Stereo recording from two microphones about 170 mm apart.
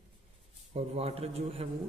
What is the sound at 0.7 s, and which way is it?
Speech, 35° right (ahead or behind).